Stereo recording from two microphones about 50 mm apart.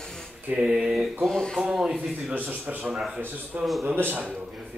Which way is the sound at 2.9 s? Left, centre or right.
Centre.